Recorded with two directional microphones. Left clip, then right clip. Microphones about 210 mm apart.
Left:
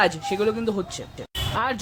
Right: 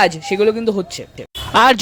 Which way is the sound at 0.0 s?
25° right (ahead or behind).